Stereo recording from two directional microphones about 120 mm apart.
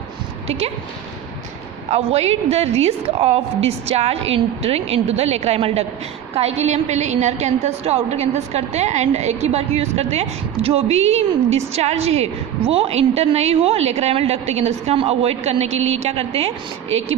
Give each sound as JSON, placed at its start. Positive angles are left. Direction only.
{"t": 0.4, "sound": "a woman's voice", "side_deg": -60}
{"t": 1.9, "sound": "a woman's voice", "side_deg": -60}